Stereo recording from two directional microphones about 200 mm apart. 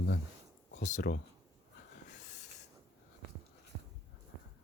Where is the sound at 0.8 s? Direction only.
35° left (ahead or behind).